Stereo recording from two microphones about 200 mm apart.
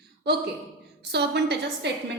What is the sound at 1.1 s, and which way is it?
Speech, 55° right (ahead or behind).